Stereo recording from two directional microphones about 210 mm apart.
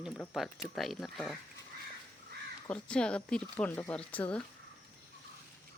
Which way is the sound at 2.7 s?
5° left (ahead or behind).